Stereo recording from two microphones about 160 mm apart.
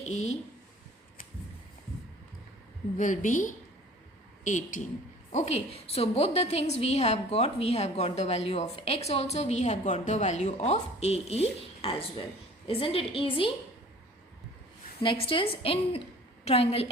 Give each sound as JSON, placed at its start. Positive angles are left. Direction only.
{"t": 0.0, "sound": "a woman's voice", "side_deg": 45}
{"t": 3.0, "sound": "a woman's voice", "side_deg": 55}
{"t": 15.0, "sound": "a woman's voice", "side_deg": 35}